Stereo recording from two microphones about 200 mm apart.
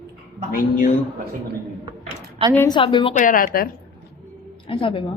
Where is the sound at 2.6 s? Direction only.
20° left (ahead or behind).